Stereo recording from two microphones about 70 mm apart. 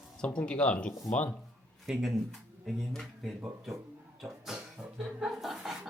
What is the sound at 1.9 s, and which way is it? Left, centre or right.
Speech, centre.